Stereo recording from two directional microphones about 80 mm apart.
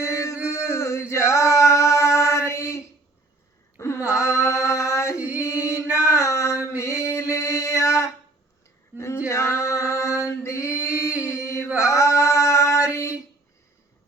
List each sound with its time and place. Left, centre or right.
0.0 s chant: left
0.5 s male singing: left
3.8 s a sound: left
9.3 s music: left
10.8 s singing: centre
11.3 s chant: left
11.9 s a sound: left